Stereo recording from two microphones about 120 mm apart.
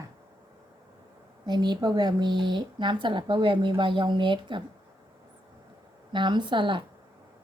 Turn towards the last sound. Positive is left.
turn(degrees=-40)  # may be behind; listen again after turning